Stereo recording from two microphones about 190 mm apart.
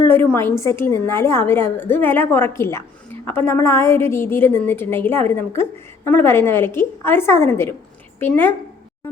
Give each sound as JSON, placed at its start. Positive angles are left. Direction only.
{"t": 0.0, "sound": "a woman's voice", "side_deg": 10}